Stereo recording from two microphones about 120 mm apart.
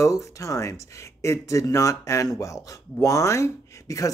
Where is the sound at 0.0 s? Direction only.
25° left (ahead or behind).